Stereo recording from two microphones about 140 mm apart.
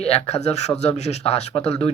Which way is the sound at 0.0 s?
45° left (ahead or behind).